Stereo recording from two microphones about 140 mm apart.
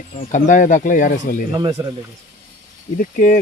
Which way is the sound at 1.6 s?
25° right (ahead or behind).